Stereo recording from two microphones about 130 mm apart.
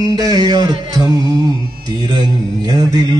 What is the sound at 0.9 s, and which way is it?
Music, 30° right (ahead or behind).